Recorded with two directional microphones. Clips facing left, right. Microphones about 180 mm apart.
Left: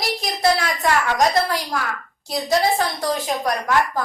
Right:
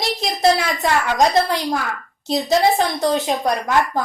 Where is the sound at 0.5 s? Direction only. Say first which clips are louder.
Right 1 dB; 20° right (ahead or behind).